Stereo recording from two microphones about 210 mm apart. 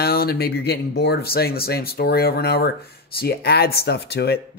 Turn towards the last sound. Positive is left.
turn(degrees=50)  # may be behind; listen again after turning